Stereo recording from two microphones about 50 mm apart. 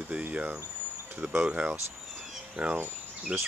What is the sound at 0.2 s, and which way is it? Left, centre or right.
Speech, right.